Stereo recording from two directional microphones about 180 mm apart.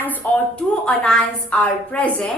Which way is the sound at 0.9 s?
5° left (ahead or behind).